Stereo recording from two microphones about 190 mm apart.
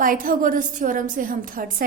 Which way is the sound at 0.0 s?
45° right (ahead or behind).